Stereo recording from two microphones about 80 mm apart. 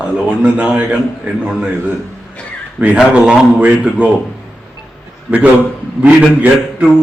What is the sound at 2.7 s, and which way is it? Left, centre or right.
A man's voice, centre.